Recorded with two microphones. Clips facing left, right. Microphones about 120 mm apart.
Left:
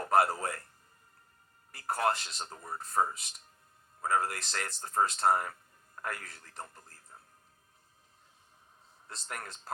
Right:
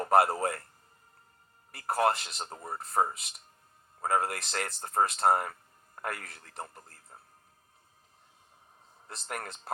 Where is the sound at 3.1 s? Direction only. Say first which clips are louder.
Right 1 dB; 60° right (ahead or behind).